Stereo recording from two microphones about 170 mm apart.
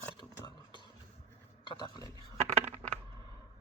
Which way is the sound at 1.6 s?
25° left (ahead or behind).